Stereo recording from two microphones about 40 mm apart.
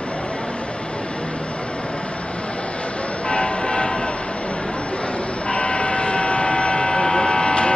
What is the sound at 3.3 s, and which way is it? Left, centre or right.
Train, left.